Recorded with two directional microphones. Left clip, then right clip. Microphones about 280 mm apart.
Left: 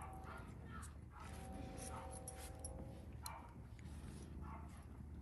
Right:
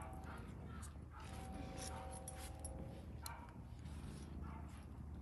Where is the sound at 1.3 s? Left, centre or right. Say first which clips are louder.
Right 3 dB; centre.